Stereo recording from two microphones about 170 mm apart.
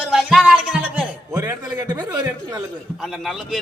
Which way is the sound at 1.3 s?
20° right (ahead or behind).